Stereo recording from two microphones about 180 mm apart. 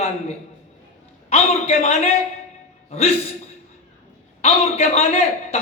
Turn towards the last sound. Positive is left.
turn(degrees=35)  # may be behind; listen again after turning